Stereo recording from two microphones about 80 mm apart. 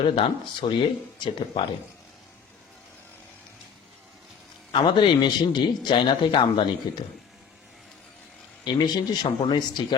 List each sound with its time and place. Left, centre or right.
0.0 s speech: left
4.7 s a man's voice: left
6.9 s speech: left
8.6 s a man's voice: left